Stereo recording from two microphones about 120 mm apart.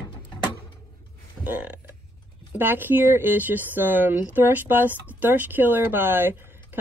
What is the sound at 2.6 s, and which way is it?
Speech, 15° right (ahead or behind).